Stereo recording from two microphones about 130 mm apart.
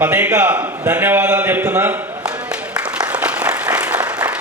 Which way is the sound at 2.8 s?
10° right (ahead or behind).